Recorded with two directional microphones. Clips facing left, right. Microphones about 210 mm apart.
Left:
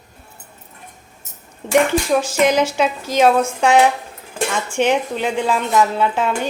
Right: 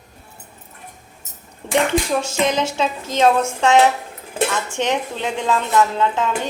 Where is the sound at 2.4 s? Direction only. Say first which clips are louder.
Left 5 dB; 10° left (ahead or behind).